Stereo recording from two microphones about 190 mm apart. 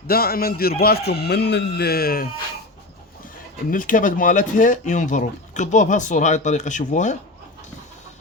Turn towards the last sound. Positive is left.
turn(degrees=40)  # may be behind; listen again after turning